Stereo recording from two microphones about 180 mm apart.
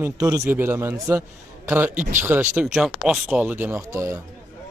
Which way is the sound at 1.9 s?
45° right (ahead or behind).